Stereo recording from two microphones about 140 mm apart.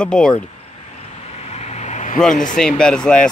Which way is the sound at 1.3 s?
50° left (ahead or behind).